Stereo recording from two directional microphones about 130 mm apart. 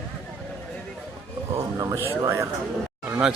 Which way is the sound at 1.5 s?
25° right (ahead or behind).